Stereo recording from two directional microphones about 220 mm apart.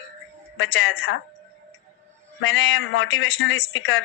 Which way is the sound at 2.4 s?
60° left (ahead or behind).